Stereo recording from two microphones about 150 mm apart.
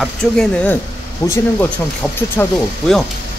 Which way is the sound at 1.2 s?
20° left (ahead or behind).